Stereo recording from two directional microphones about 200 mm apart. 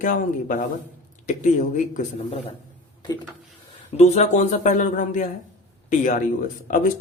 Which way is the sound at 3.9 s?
35° left (ahead or behind).